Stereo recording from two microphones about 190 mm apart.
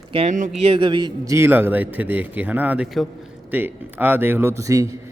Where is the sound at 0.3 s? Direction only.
45° right (ahead or behind).